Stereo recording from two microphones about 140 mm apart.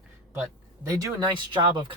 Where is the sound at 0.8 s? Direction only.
25° right (ahead or behind).